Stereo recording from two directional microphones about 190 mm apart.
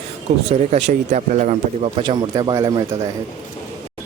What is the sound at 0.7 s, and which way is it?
Speech, 35° right (ahead or behind).